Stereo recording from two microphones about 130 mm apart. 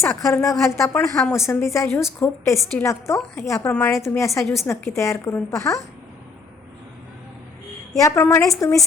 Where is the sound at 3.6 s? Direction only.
10° left (ahead or behind).